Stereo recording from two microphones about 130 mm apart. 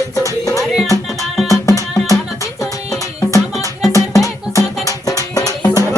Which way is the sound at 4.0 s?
25° left (ahead or behind).